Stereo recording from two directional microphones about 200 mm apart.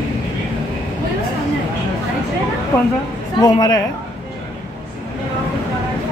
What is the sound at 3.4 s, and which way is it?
Speech, 20° left (ahead or behind).